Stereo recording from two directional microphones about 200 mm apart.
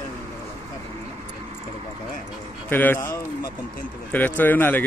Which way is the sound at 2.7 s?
10° left (ahead or behind).